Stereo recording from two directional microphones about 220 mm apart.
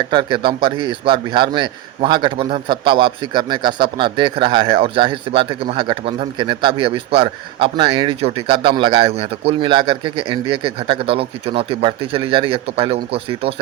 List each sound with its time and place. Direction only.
0.1 s a man's voice: 20° right (ahead or behind)